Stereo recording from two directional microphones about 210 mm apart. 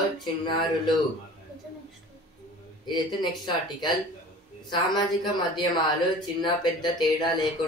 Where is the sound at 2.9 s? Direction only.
20° left (ahead or behind).